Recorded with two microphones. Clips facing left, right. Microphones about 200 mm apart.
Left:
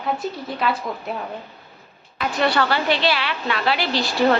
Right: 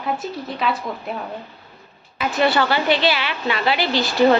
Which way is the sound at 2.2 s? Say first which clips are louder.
Right 2 dB; 5° right (ahead or behind).